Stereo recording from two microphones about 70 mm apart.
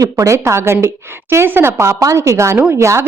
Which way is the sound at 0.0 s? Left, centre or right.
Right.